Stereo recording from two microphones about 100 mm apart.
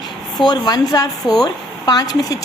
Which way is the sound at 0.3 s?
45° left (ahead or behind).